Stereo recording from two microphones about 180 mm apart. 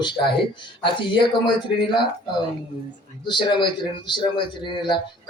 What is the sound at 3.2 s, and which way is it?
A man's voice, 25° left (ahead or behind).